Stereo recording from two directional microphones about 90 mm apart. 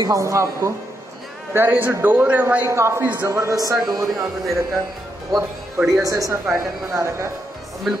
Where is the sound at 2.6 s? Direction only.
30° right (ahead or behind).